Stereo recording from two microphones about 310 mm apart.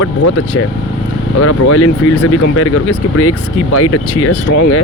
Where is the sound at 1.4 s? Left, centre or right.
Left.